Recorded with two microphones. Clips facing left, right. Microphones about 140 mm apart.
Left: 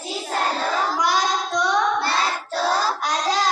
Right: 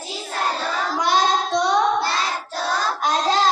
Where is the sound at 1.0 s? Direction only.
25° right (ahead or behind).